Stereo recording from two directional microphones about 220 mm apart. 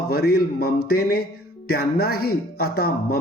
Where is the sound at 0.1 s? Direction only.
45° left (ahead or behind).